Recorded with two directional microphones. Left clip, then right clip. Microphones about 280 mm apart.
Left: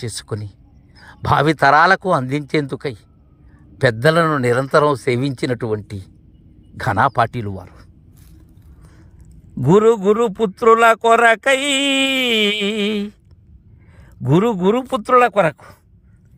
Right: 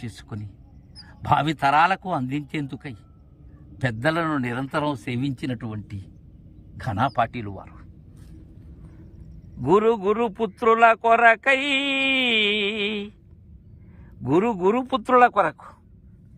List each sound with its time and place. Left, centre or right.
1.3 s a man's voice: centre
3.8 s a man's voice: left
7.3 s a man's voice: left
9.6 s speech: left
14.2 s speech: left